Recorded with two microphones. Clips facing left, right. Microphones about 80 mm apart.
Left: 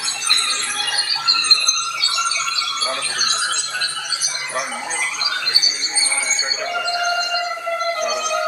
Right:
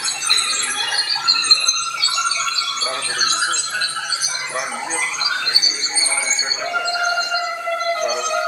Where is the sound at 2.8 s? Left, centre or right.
Right.